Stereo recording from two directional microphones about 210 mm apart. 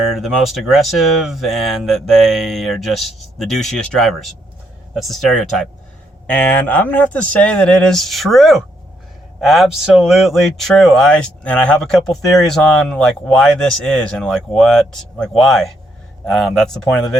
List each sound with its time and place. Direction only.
0.1 s speech: centre (ahead or behind)